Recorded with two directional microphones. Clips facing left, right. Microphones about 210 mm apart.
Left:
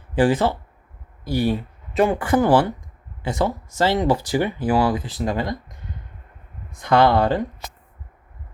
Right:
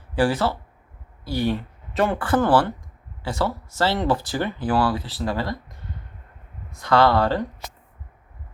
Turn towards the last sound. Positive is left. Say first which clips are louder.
# left 2 dB
turn(degrees=20)  # may be behind; listen again after turning